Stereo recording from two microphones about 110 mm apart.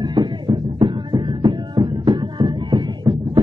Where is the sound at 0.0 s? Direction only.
40° right (ahead or behind).